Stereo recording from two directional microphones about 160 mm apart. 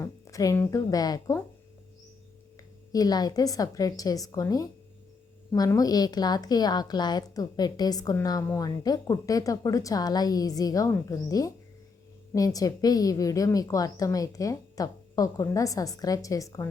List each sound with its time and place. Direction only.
0.0 s a woman's voice: 20° left (ahead or behind)
2.9 s a woman's voice: 25° left (ahead or behind)